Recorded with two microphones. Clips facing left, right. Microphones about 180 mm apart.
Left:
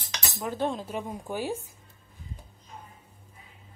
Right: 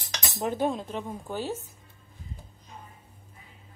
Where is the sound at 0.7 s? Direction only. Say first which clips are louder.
Right 1 dB; centre (ahead or behind).